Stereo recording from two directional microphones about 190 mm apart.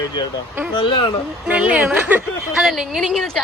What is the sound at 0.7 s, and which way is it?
Speech, 25° left (ahead or behind).